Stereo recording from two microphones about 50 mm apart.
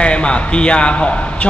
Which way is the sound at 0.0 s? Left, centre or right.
Left.